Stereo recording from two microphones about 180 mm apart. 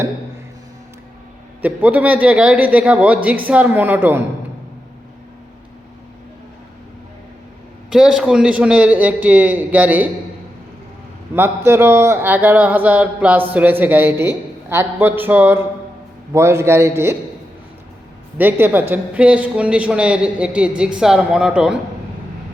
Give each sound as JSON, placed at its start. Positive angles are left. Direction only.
{"t": 1.6, "sound": "speech", "side_deg": -10}
{"t": 7.9, "sound": "speech", "side_deg": -5}
{"t": 11.3, "sound": "speech", "side_deg": -15}
{"t": 18.3, "sound": "speech", "side_deg": -10}